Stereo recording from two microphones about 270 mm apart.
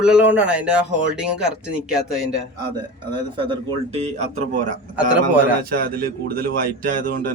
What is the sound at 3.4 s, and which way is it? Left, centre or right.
A man's voice, right.